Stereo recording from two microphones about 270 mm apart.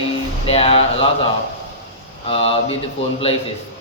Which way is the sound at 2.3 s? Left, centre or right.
Centre.